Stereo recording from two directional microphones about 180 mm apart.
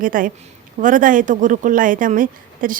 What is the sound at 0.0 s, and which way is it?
A woman's voice, 50° right (ahead or behind).